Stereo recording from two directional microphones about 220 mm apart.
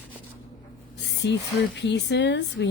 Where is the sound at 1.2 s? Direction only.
50° left (ahead or behind).